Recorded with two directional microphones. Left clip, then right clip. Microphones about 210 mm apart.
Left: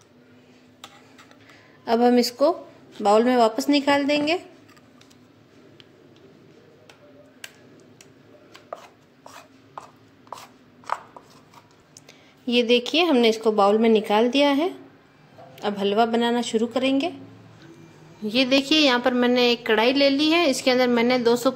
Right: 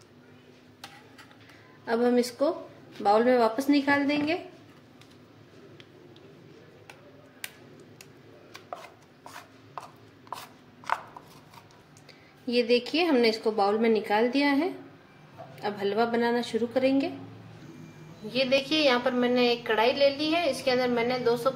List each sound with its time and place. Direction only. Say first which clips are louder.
1.9 s a woman's voice: left 6 dB; 40° left (ahead or behind)
8.6 s chopping: left 3 dB; 5° left (ahead or behind)
10.3 s a sound: left 1 dB; 5° left (ahead or behind)
13.1 s a woman's voice: left 4 dB; 45° left (ahead or behind)
18.3 s a woman's voice: left 5 dB; 50° left (ahead or behind)